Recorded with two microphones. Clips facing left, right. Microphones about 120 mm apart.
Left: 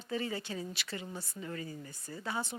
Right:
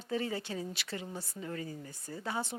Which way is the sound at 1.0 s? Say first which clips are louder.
Right 1 dB; 30° right (ahead or behind).